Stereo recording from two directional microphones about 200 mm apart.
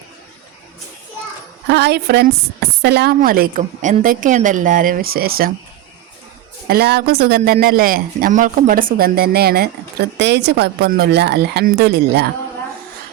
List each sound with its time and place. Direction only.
1.6 s speech: 55° right (ahead or behind)
6.7 s a woman's voice: 50° right (ahead or behind)